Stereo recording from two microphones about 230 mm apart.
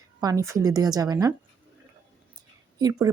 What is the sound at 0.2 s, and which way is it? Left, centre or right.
Speech, centre.